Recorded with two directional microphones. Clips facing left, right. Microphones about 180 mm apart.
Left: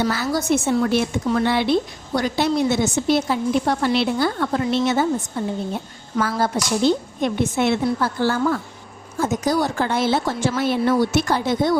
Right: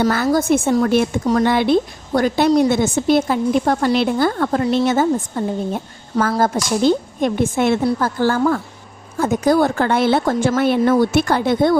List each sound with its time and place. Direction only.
0.0 s a woman's voice: 50° right (ahead or behind)
4.6 s speech: 35° right (ahead or behind)
4.9 s a woman's voice: 50° right (ahead or behind)